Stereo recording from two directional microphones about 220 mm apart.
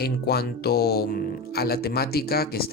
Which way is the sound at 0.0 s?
45° left (ahead or behind).